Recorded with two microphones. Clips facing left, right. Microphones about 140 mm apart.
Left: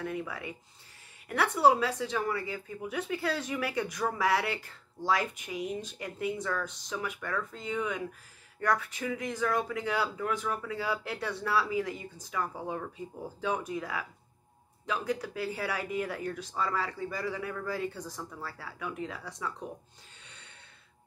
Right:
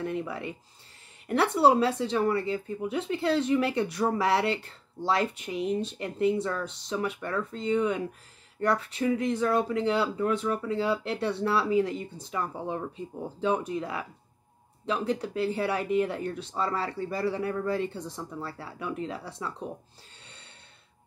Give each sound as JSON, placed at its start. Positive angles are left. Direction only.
{"t": 0.0, "sound": "speech", "side_deg": -25}